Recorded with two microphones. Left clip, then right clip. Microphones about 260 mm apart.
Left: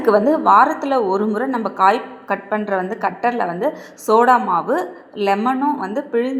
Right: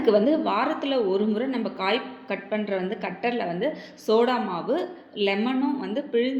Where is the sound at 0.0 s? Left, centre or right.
Centre.